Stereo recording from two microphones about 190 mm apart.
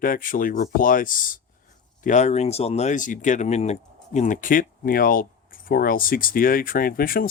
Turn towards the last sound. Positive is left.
turn(degrees=50)  # may be behind; listen again after turning